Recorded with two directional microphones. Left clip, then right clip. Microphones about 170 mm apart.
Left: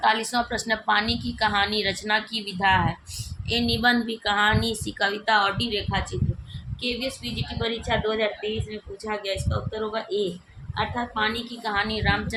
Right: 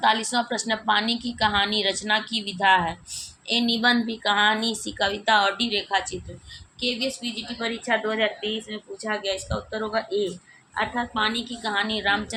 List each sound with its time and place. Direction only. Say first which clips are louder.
0.0 s a woman's voice: even; 15° right (ahead or behind)